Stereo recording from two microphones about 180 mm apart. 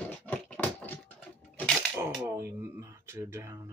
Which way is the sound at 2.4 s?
15° right (ahead or behind).